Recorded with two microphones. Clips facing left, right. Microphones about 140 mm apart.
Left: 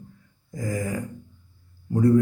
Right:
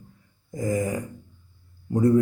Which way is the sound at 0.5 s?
20° right (ahead or behind).